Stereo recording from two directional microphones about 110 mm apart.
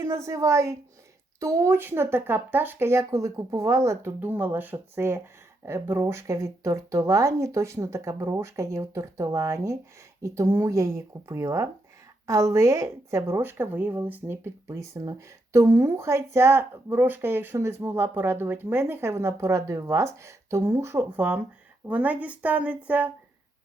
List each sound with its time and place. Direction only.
0.0 s speech: 25° right (ahead or behind)